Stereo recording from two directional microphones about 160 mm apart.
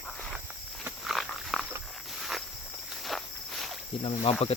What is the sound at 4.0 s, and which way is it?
Speech, 40° left (ahead or behind).